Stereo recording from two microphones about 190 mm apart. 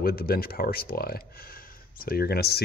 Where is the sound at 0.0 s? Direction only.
50° left (ahead or behind).